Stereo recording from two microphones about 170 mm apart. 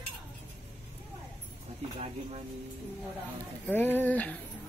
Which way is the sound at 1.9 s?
40° right (ahead or behind).